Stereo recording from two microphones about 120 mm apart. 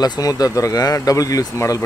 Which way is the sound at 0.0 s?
30° left (ahead or behind).